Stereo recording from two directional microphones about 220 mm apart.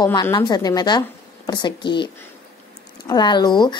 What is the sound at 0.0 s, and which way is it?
A woman's voice, 20° left (ahead or behind).